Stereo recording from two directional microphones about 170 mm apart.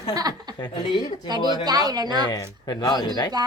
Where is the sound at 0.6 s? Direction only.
25° left (ahead or behind).